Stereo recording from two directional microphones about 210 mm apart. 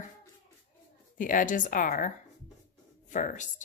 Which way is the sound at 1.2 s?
40° left (ahead or behind).